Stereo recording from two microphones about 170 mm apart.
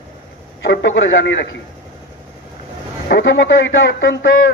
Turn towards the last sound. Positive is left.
turn(degrees=90)